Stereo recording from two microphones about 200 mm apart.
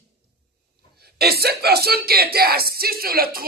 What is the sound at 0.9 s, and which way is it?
Speech, 50° right (ahead or behind).